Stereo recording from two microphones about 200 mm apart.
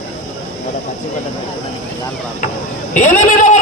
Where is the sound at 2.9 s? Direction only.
35° left (ahead or behind).